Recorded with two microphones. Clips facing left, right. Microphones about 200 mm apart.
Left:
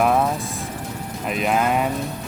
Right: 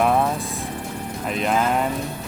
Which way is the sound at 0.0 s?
Centre (ahead or behind).